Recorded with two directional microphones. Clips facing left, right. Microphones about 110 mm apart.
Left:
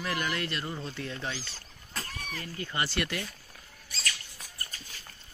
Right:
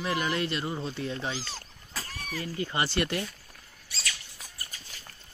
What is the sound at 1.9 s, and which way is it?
Vehicle, 5° right (ahead or behind).